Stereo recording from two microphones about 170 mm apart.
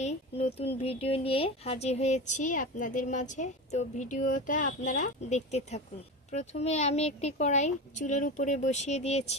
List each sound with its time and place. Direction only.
0.0 s speech: 40° left (ahead or behind)